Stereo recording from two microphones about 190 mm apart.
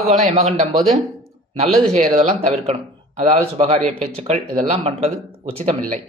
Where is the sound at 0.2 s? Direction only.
35° right (ahead or behind).